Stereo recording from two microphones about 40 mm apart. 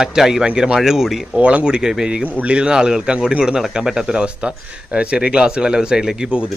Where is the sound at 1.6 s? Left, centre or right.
Right.